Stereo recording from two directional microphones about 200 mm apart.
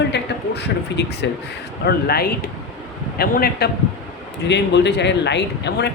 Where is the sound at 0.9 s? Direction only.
60° left (ahead or behind).